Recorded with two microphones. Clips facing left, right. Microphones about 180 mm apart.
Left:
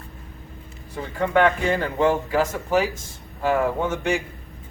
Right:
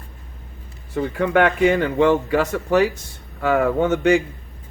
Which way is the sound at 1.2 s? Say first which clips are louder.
Right 2 dB; 75° right (ahead or behind).